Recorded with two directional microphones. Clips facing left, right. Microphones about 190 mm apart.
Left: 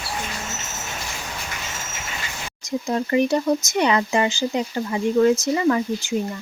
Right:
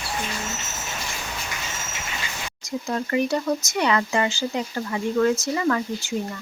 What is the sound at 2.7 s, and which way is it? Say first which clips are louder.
Speech: left 4 dB; 20° left (ahead or behind).